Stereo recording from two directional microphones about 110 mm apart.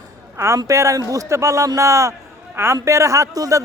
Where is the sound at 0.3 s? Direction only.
25° right (ahead or behind).